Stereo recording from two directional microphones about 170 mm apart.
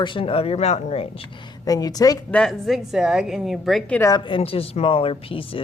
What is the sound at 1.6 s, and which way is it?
Speech, 20° left (ahead or behind).